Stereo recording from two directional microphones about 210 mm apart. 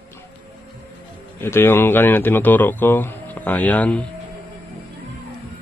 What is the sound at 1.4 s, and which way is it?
Speech, 10° left (ahead or behind).